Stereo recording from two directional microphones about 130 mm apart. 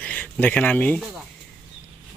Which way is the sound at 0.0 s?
15° left (ahead or behind).